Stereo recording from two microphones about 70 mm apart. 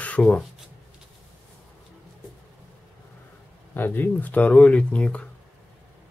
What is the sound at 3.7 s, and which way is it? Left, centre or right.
Speech, left.